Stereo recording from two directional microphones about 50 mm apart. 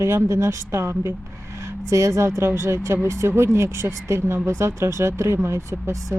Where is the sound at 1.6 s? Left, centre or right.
Right.